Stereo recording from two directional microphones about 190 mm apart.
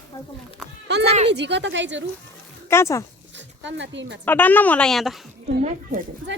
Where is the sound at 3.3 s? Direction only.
70° right (ahead or behind).